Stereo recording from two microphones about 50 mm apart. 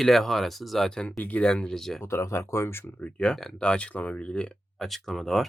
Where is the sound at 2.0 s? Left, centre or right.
Left.